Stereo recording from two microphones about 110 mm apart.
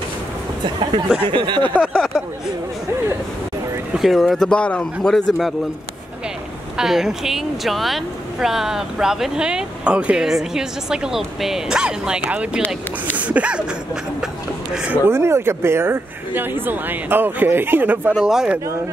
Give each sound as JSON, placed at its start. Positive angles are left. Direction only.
{"t": 1.3, "sound": "speech", "side_deg": -50}
{"t": 1.8, "sound": "speech", "side_deg": -5}
{"t": 3.9, "sound": "speech", "side_deg": 0}
{"t": 6.8, "sound": "speech", "side_deg": -5}
{"t": 12.6, "sound": "speech", "side_deg": 15}
{"t": 13.2, "sound": "speech", "side_deg": -10}
{"t": 14.2, "sound": "a sound", "side_deg": -10}
{"t": 15.0, "sound": "speech", "side_deg": -25}
{"t": 18.1, "sound": "speech", "side_deg": -5}